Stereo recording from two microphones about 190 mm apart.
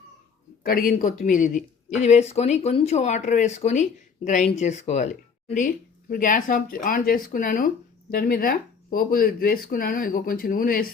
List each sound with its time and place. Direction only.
0.6 s speech: 50° left (ahead or behind)